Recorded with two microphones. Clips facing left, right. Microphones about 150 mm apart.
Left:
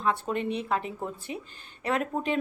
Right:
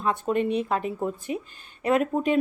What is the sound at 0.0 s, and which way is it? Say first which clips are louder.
Speech: right 4 dB; 15° right (ahead or behind).